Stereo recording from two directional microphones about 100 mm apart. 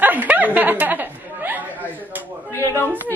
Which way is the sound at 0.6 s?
15° right (ahead or behind).